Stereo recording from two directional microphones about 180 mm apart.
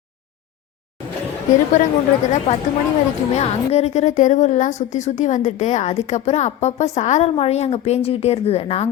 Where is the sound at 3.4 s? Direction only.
35° left (ahead or behind).